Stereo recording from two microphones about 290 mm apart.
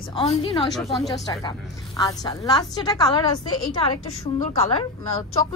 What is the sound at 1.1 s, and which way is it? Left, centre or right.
A woman's voice, centre.